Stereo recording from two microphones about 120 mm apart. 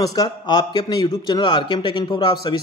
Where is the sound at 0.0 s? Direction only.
35° left (ahead or behind).